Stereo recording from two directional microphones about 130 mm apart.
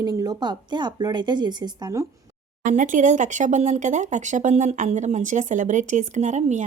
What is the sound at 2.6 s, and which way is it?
Speech, 80° right.